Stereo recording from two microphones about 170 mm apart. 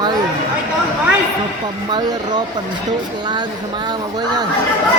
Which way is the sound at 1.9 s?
25° right (ahead or behind).